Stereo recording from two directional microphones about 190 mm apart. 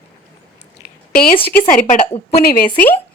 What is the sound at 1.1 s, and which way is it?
A woman's voice, 50° left (ahead or behind).